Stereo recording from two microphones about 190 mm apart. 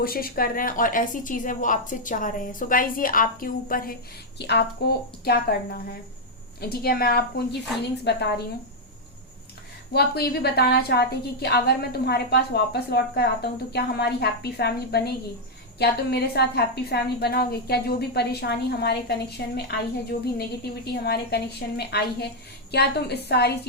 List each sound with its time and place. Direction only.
0.0 s a woman's voice: 50° left (ahead or behind)
4.4 s a woman's voice: 60° left (ahead or behind)
9.9 s a woman's voice: 55° left (ahead or behind)